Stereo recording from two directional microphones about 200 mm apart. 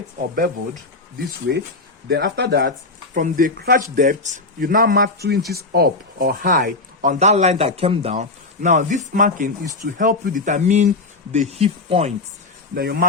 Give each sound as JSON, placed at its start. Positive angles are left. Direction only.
{"t": 0.3, "sound": "speech", "side_deg": -45}
{"t": 2.0, "sound": "speech", "side_deg": -55}
{"t": 3.2, "sound": "speech", "side_deg": -45}
{"t": 12.7, "sound": "speech", "side_deg": -50}